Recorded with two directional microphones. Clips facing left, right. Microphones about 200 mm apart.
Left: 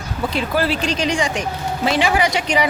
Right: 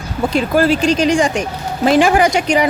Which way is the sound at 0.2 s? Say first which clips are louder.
Right 6 dB; 45° right (ahead or behind).